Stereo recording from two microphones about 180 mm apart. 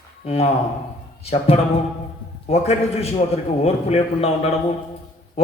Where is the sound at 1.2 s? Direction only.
35° left (ahead or behind).